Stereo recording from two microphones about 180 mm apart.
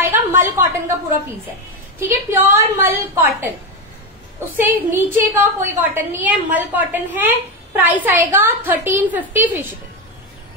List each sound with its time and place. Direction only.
0.1 s a sound: 10° right (ahead or behind)
2.0 s a woman's voice: 15° right (ahead or behind)
4.6 s a woman's voice: 10° right (ahead or behind)